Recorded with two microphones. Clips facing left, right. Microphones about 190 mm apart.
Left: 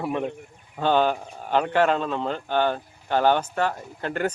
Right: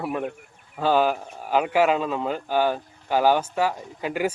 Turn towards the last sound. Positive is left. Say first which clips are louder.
# right 1 dB
turn(degrees=-5)  # may be behind; listen again after turning